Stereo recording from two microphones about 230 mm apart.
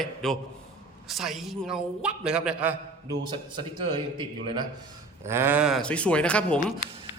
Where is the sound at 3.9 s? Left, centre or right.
Right; by 6.6 s centre.